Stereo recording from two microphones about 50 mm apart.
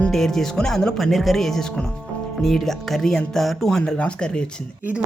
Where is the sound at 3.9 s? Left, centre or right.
Left.